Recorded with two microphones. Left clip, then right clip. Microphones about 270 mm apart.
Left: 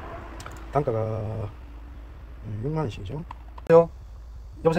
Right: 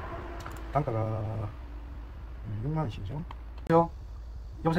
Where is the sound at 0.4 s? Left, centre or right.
Left.